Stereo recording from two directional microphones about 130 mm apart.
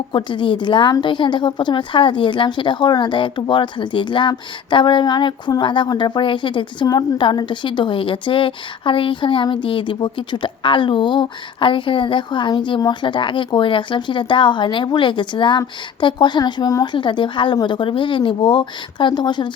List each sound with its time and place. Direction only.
0.1 s a woman's voice: 35° left (ahead or behind)